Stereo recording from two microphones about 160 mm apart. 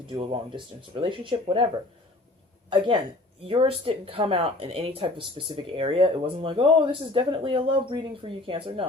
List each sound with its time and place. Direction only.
0.1 s speech: 35° right (ahead or behind)
2.6 s speech: 30° right (ahead or behind)